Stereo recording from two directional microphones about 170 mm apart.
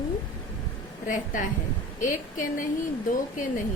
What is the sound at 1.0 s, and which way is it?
A woman's voice, 50° left (ahead or behind).